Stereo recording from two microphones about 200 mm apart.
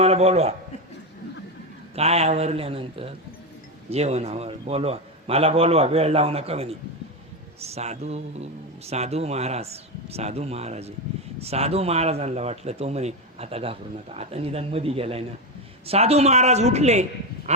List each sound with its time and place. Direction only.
0.0 s a man's voice: 30° right (ahead or behind)
2.0 s speech: 30° right (ahead or behind)